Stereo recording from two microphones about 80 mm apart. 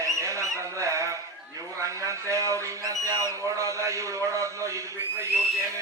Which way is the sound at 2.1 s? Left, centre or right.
Right.